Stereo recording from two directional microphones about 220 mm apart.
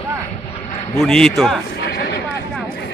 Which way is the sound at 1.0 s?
Centre (ahead or behind).